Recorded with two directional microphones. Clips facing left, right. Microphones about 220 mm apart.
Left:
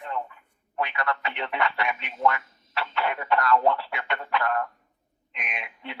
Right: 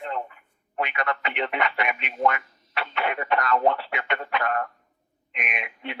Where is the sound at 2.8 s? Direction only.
20° right (ahead or behind).